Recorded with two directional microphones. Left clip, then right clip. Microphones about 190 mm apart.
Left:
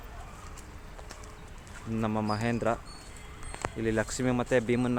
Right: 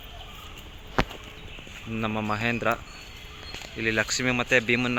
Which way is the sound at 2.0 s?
10° left (ahead or behind).